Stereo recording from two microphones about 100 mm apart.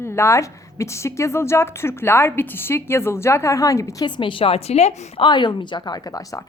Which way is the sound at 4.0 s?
50° left (ahead or behind).